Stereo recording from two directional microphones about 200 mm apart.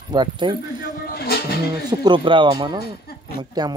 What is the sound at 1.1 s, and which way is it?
Music, 50° left (ahead or behind).